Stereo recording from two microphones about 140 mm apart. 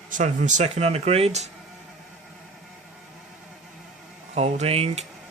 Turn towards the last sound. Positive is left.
turn(degrees=-45)  # may be behind; listen again after turning